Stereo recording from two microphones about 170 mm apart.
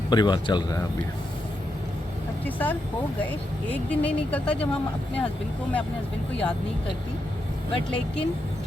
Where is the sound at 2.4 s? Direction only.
10° left (ahead or behind).